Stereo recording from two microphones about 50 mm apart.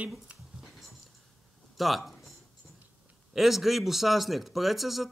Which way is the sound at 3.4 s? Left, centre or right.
Centre.